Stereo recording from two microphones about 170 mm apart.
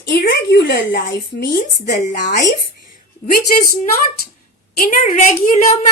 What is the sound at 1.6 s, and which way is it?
A woman's voice, 50° left (ahead or behind).